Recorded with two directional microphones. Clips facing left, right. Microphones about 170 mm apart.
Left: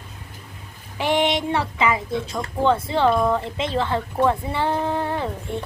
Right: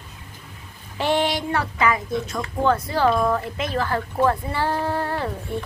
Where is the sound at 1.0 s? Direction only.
15° left (ahead or behind).